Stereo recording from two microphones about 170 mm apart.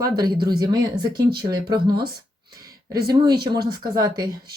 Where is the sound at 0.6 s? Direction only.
25° right (ahead or behind).